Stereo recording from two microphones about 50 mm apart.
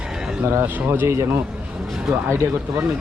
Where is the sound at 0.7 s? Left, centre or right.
Right.